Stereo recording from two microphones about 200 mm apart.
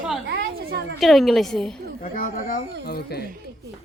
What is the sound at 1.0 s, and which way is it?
Speech, centre (ahead or behind).